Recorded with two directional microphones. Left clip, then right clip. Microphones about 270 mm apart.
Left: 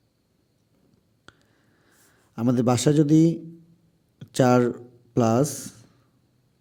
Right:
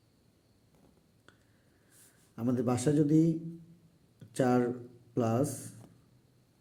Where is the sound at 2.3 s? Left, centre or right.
Left.